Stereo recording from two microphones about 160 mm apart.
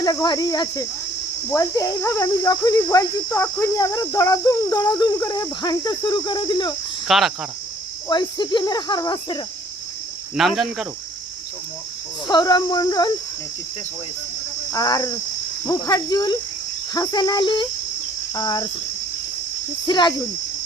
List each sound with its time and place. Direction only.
0.0 s speech: 25° left (ahead or behind)
7.1 s speech: centre (ahead or behind)
8.0 s speech: 25° left (ahead or behind)
10.3 s speech: centre (ahead or behind)
12.3 s speech: 25° left (ahead or behind)
14.7 s speech: 25° left (ahead or behind)
19.9 s speech: 30° left (ahead or behind)